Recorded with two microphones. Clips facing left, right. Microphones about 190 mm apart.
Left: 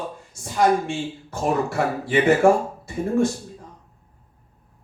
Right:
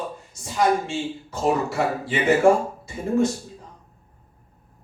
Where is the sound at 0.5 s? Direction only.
55° left (ahead or behind).